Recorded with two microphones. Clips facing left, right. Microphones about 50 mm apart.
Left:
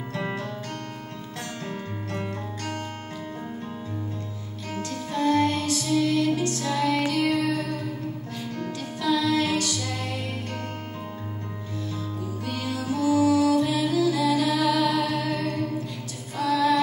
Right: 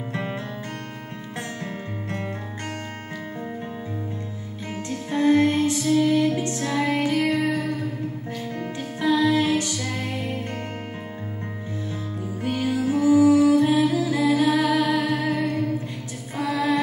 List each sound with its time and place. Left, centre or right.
0.1 s music: right
4.7 s music: right
12.4 s music: right